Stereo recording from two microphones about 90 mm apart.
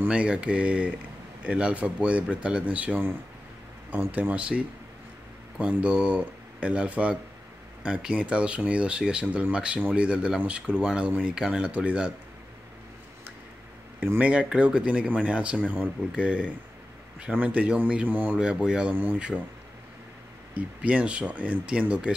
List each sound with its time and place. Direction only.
0.0 s speech: 15° right (ahead or behind)
13.9 s speech: 20° right (ahead or behind)
20.5 s speech: 15° right (ahead or behind)